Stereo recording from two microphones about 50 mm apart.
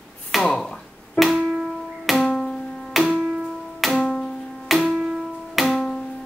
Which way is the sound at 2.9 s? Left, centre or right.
Centre.